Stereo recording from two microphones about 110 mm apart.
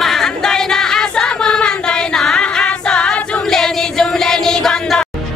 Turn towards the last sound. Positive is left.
turn(degrees=5)  # may be behind; listen again after turning